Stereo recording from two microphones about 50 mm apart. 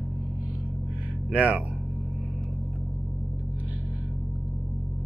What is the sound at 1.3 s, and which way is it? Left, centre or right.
Speech, right.